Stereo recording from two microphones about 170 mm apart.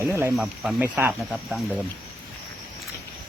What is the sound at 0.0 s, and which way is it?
Speech, 15° right (ahead or behind).